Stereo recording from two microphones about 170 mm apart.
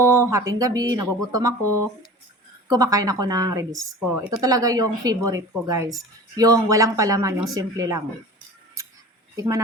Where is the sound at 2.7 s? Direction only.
20° right (ahead or behind).